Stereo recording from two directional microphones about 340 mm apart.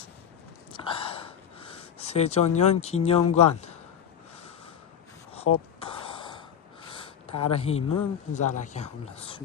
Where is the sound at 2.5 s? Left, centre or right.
Centre.